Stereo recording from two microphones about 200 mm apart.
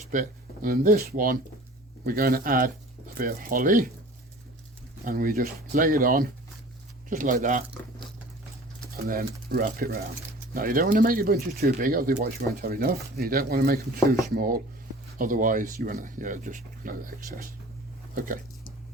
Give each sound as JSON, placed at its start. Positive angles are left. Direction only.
{"t": 0.1, "sound": "speech", "side_deg": -40}
{"t": 5.0, "sound": "speech", "side_deg": -45}
{"t": 9.0, "sound": "speech", "side_deg": -45}